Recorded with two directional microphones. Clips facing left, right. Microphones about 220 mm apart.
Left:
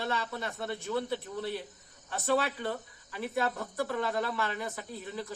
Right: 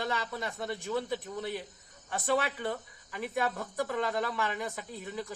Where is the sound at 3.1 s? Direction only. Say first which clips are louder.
Left 1 dB; 15° right (ahead or behind).